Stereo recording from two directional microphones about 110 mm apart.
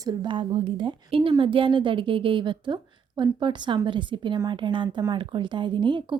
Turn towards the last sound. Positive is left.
turn(degrees=-45)  # may be behind; listen again after turning